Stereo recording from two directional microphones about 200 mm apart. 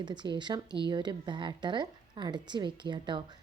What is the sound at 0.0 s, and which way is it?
Speech, 20° right (ahead or behind).